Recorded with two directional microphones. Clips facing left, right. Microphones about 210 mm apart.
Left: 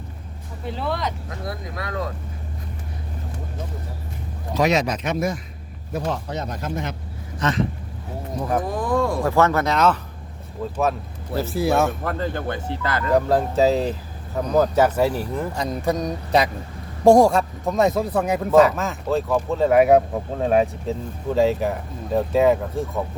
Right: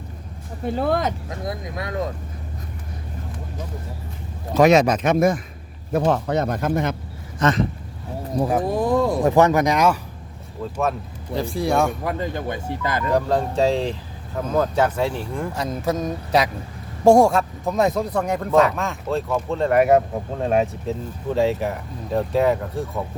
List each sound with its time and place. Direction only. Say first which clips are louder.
0.6 s speech: right 5 dB; 50° right (ahead or behind)
1.5 s speech: right 2 dB; 20° right (ahead or behind)
4.5 s speech: right 6 dB; 50° right (ahead or behind)
8.6 s speech: right 3 dB; 25° right (ahead or behind)
10.6 s speech: left 1 dB; centre (ahead or behind)
12.0 s speech: even; 15° right (ahead or behind)
13.1 s speech: left 2 dB; 5° left (ahead or behind)